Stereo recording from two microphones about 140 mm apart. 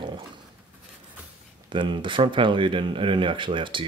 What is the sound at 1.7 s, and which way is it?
Speech, 35° right (ahead or behind).